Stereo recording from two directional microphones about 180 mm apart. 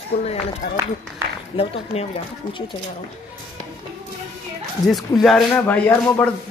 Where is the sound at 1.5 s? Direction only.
35° left (ahead or behind).